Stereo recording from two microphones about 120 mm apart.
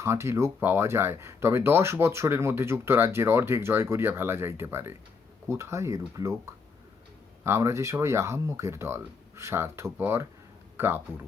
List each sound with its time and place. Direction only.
0.0 s speech: 20° right (ahead or behind)